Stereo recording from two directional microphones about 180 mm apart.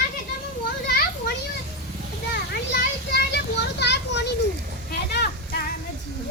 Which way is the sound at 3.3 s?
70° left (ahead or behind).